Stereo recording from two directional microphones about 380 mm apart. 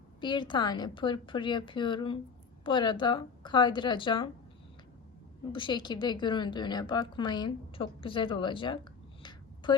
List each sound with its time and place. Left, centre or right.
0.2 s a woman's voice: centre
5.5 s a woman's voice: centre